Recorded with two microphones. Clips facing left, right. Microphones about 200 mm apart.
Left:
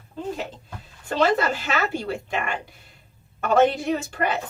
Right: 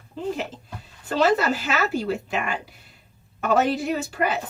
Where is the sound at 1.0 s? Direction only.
5° right (ahead or behind).